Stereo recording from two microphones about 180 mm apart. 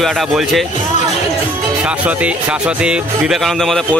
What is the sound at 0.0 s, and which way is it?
Speech, centre (ahead or behind).